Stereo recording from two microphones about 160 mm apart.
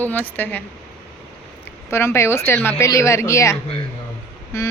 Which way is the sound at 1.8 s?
15° left (ahead or behind).